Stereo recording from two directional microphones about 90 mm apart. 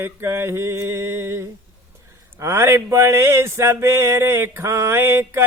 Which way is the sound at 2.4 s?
35° right (ahead or behind).